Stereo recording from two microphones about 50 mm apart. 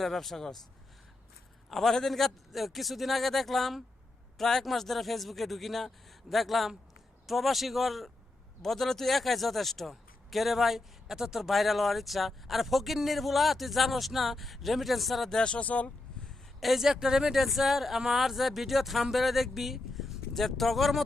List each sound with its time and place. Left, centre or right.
0.0 s a man's voice: centre
1.7 s a man's voice: centre
15.3 s speech: centre
16.2 s a sound: centre
16.8 s a man's voice: centre